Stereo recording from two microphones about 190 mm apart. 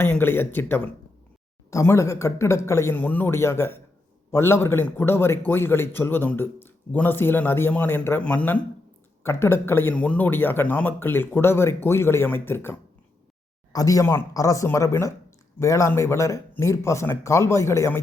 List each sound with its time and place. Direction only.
0.0 s a man's voice: 10° left (ahead or behind)
13.7 s a man's voice: 15° left (ahead or behind)